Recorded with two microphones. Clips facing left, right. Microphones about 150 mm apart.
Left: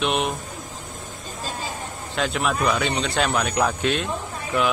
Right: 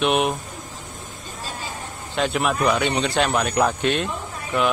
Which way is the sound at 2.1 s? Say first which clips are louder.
Right 2 dB; centre (ahead or behind).